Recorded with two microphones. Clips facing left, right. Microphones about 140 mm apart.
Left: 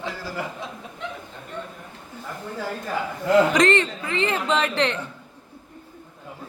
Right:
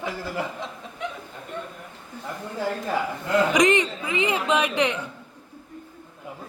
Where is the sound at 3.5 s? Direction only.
15° right (ahead or behind).